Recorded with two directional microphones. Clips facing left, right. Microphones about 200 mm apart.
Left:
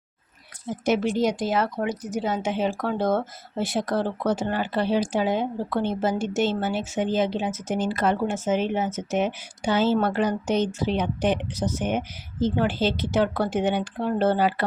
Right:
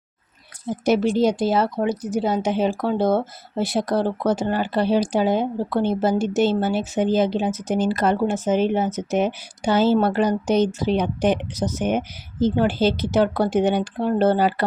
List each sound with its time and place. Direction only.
0.7 s a woman's voice: 35° right (ahead or behind)